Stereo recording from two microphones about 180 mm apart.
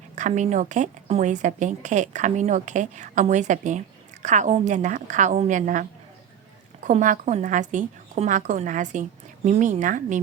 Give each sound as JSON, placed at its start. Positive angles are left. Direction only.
{"t": 0.2, "sound": "a woman's voice", "side_deg": -40}
{"t": 6.8, "sound": "a woman's voice", "side_deg": -45}